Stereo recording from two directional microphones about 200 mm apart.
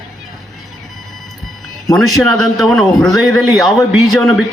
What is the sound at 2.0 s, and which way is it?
A man's voice, centre (ahead or behind).